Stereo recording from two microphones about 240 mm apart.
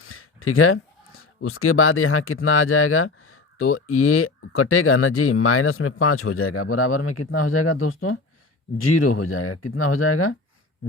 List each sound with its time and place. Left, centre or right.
0.0 s speech: left